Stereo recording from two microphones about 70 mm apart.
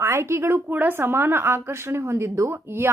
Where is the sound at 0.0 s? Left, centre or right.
Right.